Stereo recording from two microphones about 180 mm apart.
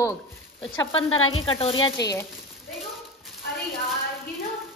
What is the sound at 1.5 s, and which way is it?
Speech, 30° left (ahead or behind).